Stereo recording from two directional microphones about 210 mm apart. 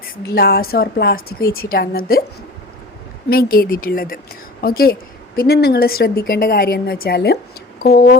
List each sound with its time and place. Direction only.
0.3 s a woman's voice: 45° left (ahead or behind)
3.2 s a woman's voice: 45° left (ahead or behind)